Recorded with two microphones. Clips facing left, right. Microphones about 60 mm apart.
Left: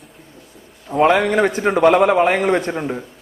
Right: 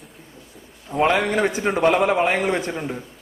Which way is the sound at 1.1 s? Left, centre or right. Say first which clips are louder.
Left 4 dB; left.